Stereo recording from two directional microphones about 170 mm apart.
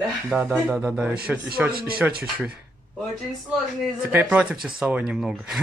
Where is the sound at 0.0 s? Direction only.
5° right (ahead or behind).